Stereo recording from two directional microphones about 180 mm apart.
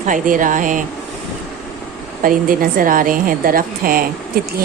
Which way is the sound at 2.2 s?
50° right (ahead or behind).